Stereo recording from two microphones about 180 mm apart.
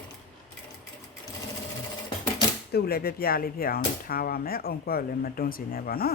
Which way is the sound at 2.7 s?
60° left (ahead or behind).